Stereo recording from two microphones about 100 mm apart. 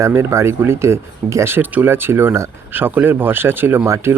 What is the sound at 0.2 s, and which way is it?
Speech, 30° right (ahead or behind).